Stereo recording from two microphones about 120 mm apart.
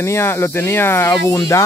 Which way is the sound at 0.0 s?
20° left (ahead or behind).